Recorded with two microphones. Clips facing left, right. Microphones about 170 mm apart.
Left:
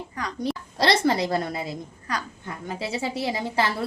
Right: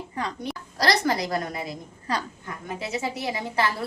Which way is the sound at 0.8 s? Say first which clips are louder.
Left 2 dB; 25° left (ahead or behind).